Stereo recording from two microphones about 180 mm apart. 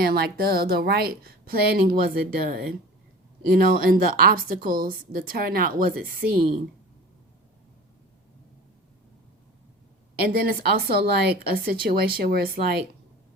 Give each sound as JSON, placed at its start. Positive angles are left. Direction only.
{"t": 0.0, "sound": "a woman's voice", "side_deg": -60}
{"t": 10.2, "sound": "a woman's voice", "side_deg": -55}